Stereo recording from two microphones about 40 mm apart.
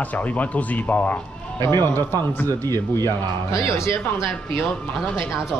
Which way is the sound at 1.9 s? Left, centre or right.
Left.